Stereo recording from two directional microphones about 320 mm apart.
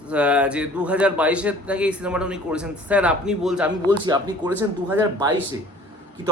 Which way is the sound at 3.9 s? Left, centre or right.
Centre.